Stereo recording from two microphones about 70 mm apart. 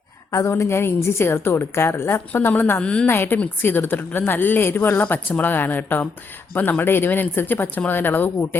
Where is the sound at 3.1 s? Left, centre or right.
Left.